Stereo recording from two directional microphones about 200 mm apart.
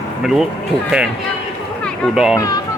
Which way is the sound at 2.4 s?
20° left (ahead or behind).